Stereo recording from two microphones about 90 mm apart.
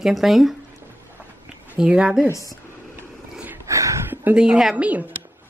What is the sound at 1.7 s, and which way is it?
Speech, 10° right (ahead or behind).